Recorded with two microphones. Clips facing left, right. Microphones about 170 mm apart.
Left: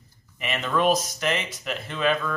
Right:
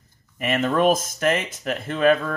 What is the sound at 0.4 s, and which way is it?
Speech, 45° right (ahead or behind).